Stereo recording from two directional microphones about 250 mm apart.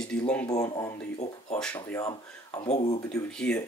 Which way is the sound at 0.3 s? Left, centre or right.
Centre.